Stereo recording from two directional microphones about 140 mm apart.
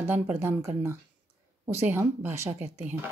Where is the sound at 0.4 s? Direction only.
20° right (ahead or behind).